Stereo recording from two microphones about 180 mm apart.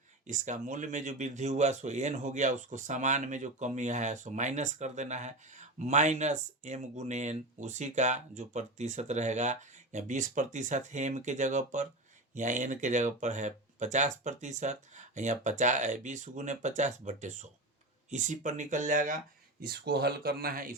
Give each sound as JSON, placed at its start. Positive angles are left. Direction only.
{"t": 0.3, "sound": "speech", "side_deg": -40}